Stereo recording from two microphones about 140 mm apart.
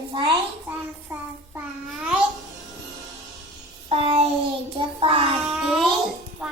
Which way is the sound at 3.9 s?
45° right (ahead or behind).